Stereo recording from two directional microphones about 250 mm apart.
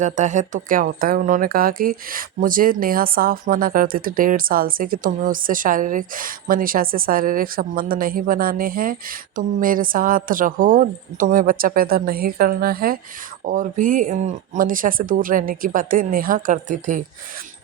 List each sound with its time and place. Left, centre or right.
0.0 s speech: right